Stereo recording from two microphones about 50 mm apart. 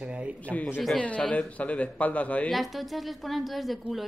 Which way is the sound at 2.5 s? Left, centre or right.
Centre.